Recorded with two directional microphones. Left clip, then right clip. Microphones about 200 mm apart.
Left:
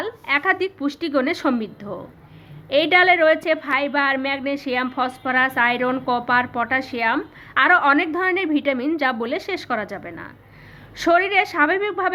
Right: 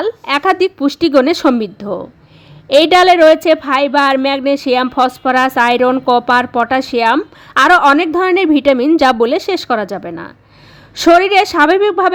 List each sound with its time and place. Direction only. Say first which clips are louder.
0.0 s a woman's voice: right 7 dB; 60° right (ahead or behind)